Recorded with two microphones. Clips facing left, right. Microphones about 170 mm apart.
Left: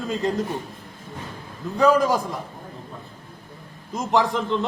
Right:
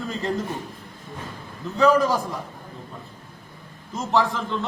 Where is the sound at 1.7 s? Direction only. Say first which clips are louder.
Even; 15° left (ahead or behind).